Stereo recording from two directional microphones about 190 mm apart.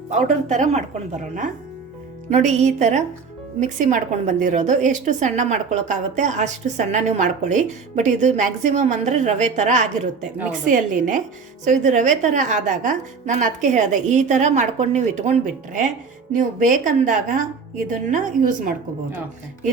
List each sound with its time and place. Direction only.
0.1 s a woman's voice: 40° right (ahead or behind)